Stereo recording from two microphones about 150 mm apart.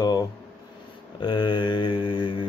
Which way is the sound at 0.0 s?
25° left (ahead or behind).